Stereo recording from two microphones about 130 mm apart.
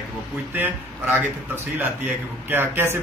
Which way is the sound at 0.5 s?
15° right (ahead or behind).